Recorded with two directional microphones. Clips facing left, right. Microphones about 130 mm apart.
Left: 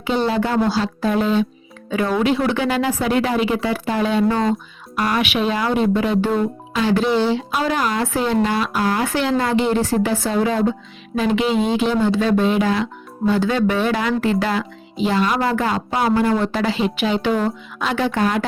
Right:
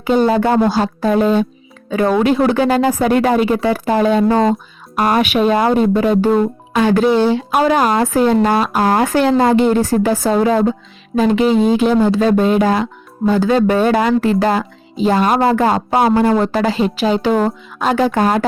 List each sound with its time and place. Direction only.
0.0 s speech: 45° right (ahead or behind)